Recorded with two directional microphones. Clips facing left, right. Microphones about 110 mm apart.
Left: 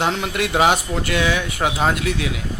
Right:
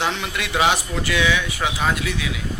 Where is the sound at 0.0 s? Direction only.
45° left (ahead or behind).